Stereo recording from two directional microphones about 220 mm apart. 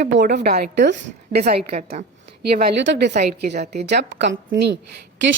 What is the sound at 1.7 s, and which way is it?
Speech, 35° right (ahead or behind).